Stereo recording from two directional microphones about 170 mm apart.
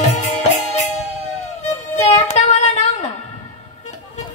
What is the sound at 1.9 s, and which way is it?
Music, 40° left (ahead or behind).